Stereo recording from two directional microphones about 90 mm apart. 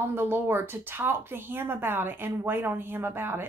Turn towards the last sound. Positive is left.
turn(degrees=-25)  # may be behind; listen again after turning